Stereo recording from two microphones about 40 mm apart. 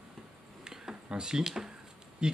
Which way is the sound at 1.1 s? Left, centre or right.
Right.